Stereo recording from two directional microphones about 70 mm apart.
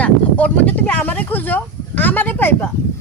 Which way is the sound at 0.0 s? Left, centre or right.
Left.